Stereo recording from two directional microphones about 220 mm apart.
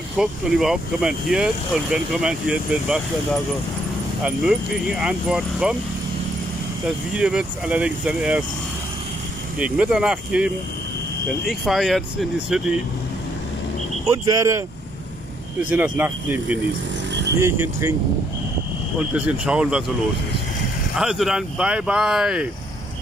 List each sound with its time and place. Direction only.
0.2 s speech: centre (ahead or behind)
4.2 s speech: 5° right (ahead or behind)
6.9 s speech: 5° right (ahead or behind)
9.6 s speech: 5° right (ahead or behind)
14.0 s speech: 15° right (ahead or behind)
15.7 s speech: 10° right (ahead or behind)
18.9 s speech: 5° right (ahead or behind)
21.0 s speech: centre (ahead or behind)